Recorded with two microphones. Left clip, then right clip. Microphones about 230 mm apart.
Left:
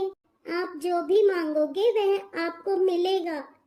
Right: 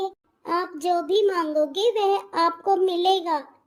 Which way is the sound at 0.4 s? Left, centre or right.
Centre.